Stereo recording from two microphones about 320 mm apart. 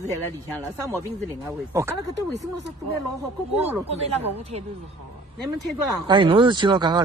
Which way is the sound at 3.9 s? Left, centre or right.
Centre.